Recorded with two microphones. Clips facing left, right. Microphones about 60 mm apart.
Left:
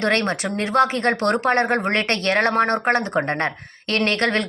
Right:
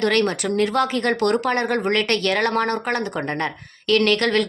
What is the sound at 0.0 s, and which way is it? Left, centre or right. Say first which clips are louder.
A woman's voice: right 1 dB; left.